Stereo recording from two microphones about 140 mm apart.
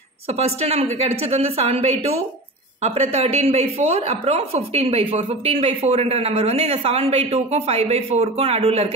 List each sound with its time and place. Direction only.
0.4 s a woman's voice: 50° right (ahead or behind)